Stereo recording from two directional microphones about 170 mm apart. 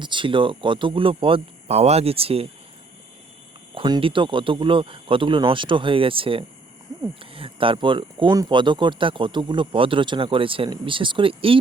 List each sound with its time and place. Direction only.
0.0 s speech: 30° right (ahead or behind)
3.8 s speech: 30° right (ahead or behind)